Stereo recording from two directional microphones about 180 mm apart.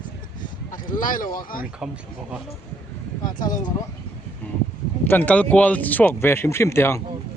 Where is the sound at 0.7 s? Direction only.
50° left (ahead or behind).